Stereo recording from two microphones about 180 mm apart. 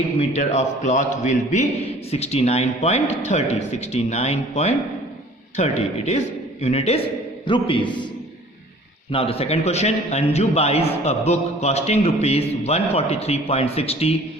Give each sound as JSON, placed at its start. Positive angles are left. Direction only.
{"t": 0.2, "sound": "a man's voice", "side_deg": 40}
{"t": 9.1, "sound": "a man's voice", "side_deg": 30}